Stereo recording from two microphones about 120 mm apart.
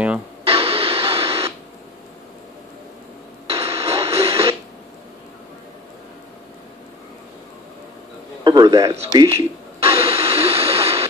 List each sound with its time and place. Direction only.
0.5 s music: 55° right (ahead or behind)
3.4 s radio: 55° right (ahead or behind)
8.5 s speech: 35° right (ahead or behind)
9.8 s a sound: 55° right (ahead or behind)